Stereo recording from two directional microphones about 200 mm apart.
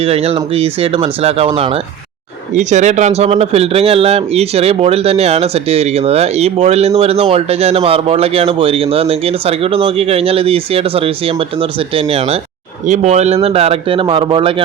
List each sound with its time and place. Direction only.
0.0 s speech: 30° right (ahead or behind)